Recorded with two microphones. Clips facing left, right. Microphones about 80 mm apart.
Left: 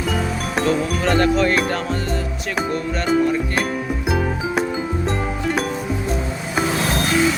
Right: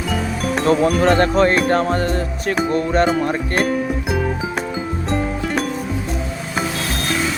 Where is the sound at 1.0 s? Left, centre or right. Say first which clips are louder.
Even; right.